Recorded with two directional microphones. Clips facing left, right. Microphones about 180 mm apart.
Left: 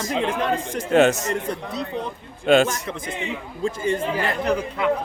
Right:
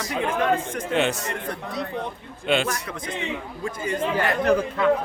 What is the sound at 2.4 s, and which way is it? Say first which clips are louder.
Speech: left 7 dB; 45° left (ahead or behind).